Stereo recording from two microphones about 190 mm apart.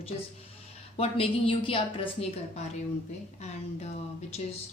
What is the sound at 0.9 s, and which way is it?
Speech, 30° left (ahead or behind).